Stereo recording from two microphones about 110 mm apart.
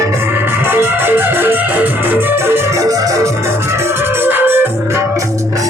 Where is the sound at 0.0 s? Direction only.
20° right (ahead or behind).